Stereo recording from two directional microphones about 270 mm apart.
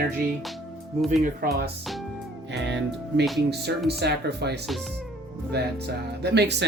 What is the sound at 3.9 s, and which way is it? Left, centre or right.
Speech, right.